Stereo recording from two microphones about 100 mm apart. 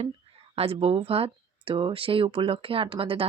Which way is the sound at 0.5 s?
75° right (ahead or behind).